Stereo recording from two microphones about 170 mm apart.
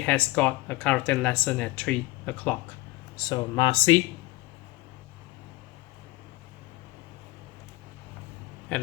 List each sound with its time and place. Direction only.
0.0 s speech: 5° left (ahead or behind)
3.2 s speech: 25° left (ahead or behind)
8.7 s speech: 10° left (ahead or behind)